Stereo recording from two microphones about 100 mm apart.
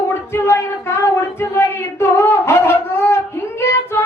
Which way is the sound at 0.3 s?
25° left (ahead or behind).